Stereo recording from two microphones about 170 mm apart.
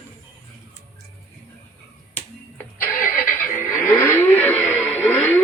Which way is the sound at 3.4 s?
10° left (ahead or behind).